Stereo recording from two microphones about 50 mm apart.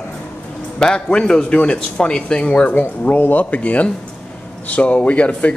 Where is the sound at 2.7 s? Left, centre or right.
Left.